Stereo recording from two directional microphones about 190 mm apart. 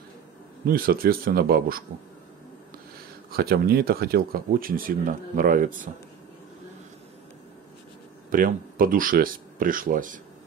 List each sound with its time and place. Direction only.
0.7 s speech: 50° right (ahead or behind)
3.3 s speech: 55° right (ahead or behind); by 6.0 s 35° right (ahead or behind)
8.3 s speech: 50° right (ahead or behind)